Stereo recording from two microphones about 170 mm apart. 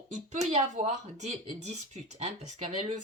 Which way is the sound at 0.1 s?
40° right (ahead or behind).